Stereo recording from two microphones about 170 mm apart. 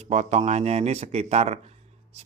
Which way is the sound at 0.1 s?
40° right (ahead or behind).